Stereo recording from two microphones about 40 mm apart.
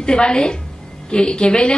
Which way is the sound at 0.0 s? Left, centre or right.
Left.